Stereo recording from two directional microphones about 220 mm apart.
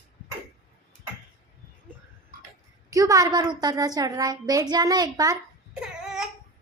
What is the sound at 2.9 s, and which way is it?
A woman's voice, 15° right (ahead or behind).